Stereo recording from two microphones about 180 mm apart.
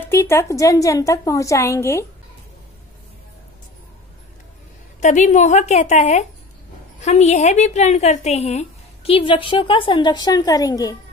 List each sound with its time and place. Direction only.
0.1 s a woman's voice: 15° left (ahead or behind)
5.0 s a woman's voice: 40° left (ahead or behind); by 11.0 s 20° left (ahead or behind)